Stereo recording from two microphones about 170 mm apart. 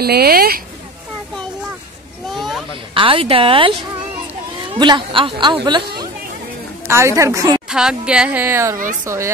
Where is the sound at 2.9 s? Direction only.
30° right (ahead or behind).